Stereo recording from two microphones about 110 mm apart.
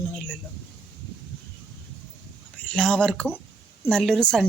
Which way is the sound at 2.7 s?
5° left (ahead or behind).